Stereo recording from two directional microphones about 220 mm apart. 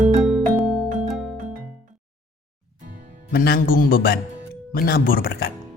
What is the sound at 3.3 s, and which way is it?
A man's voice, 45° left (ahead or behind).